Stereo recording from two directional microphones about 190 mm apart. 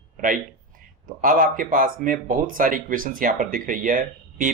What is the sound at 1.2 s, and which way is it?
Speech, 45° right (ahead or behind).